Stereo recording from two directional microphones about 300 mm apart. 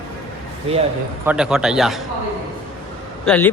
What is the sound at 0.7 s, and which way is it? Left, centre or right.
Speech, centre.